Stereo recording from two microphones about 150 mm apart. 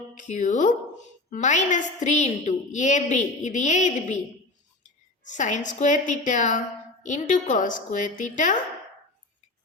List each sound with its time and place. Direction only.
0.2 s a woman's voice: 55° left (ahead or behind)
5.2 s a woman's voice: 55° left (ahead or behind)